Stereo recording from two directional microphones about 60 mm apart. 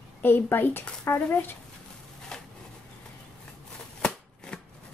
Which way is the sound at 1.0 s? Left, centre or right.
Left.